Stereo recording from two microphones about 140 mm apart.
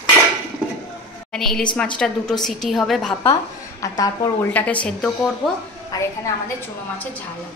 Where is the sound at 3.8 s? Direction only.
25° left (ahead or behind).